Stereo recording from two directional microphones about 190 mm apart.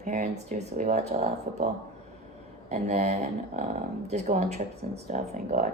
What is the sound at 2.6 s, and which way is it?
Speech, 35° right (ahead or behind).